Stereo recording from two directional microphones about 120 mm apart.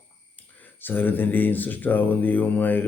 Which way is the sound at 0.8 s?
15° left (ahead or behind).